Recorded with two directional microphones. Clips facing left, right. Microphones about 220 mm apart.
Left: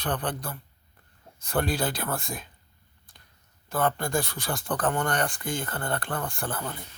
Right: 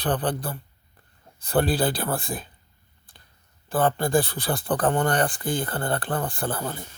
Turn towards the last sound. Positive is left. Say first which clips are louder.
# right 4 dB
turn(degrees=-35)  # may be behind; listen again after turning